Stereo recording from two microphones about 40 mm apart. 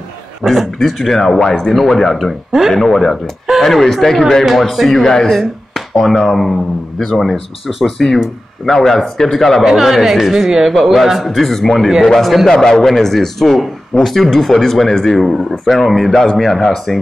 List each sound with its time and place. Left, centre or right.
0.5 s speech: centre
1.4 s speech: centre
1.7 s speech: centre
2.1 s speech: centre
2.7 s speech: centre
4.5 s speech: centre
9.7 s speech: centre
12.2 s speech: centre
12.4 s speech: centre
15.6 s speech: centre
16.0 s speech: centre